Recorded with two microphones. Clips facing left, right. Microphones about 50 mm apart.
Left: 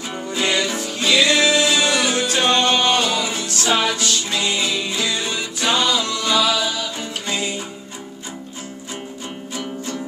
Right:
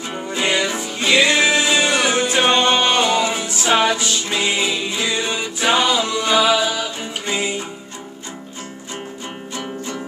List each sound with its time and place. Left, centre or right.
0.1 s music: centre